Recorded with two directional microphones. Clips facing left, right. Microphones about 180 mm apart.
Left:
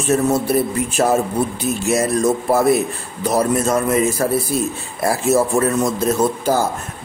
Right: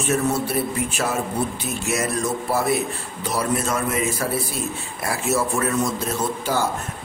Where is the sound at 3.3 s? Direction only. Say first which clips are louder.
Left 6 dB; 40° left (ahead or behind).